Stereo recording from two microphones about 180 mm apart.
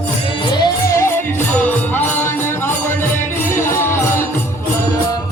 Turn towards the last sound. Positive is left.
turn(degrees=15)  # may be behind; listen again after turning